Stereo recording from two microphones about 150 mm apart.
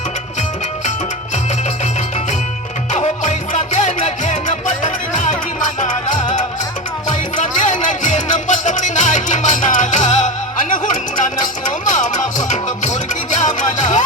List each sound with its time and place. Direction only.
2.9 s music: 50° left (ahead or behind)